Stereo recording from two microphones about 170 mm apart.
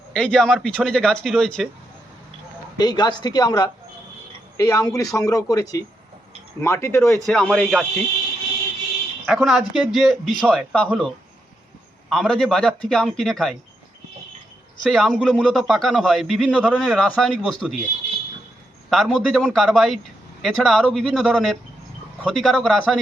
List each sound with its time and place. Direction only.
0.1 s a man's voice: 5° left (ahead or behind)
2.7 s speech: 25° left (ahead or behind)
7.3 s a man's voice: centre (ahead or behind)
9.2 s a man's voice: centre (ahead or behind)
14.8 s a man's voice: centre (ahead or behind)
18.9 s a man's voice: centre (ahead or behind)